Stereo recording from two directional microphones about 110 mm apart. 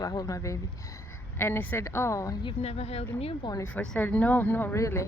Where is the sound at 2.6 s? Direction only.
70° left (ahead or behind).